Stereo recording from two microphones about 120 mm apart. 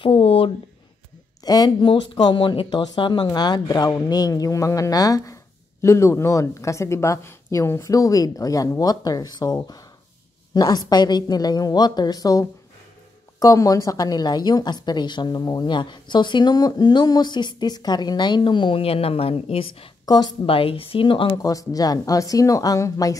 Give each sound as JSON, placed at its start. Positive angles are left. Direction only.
{"t": 0.0, "sound": "speech", "side_deg": 50}
{"t": 1.4, "sound": "a woman's voice", "side_deg": 35}
{"t": 21.3, "sound": "speech", "side_deg": 30}